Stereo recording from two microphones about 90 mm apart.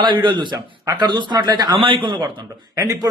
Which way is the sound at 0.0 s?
65° right (ahead or behind).